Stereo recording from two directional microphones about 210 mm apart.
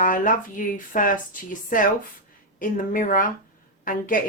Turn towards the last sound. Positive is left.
turn(degrees=40)  # may be behind; listen again after turning